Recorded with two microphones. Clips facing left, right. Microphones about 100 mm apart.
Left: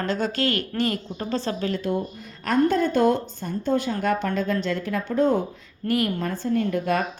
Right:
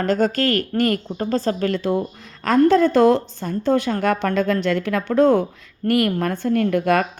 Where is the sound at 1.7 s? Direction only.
90° right.